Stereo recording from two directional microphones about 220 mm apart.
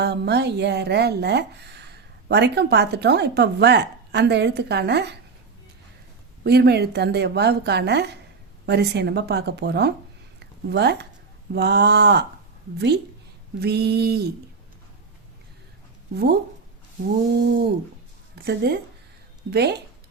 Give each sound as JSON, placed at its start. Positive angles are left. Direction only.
{"t": 0.0, "sound": "speech", "side_deg": -50}
{"t": 6.4, "sound": "speech", "side_deg": -45}
{"t": 13.6, "sound": "speech", "side_deg": -50}
{"t": 16.1, "sound": "speech", "side_deg": -45}